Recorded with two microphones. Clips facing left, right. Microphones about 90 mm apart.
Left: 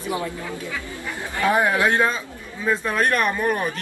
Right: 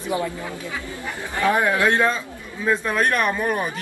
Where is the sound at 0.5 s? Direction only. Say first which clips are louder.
Even; 20° right (ahead or behind).